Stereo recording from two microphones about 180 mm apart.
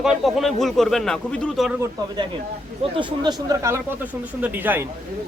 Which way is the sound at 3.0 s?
20° right (ahead or behind).